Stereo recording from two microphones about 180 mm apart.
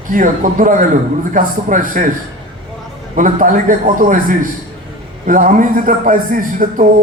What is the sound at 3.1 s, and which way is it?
Speech, 50° right (ahead or behind).